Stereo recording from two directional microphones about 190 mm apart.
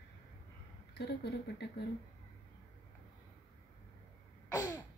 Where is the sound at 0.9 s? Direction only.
60° left (ahead or behind).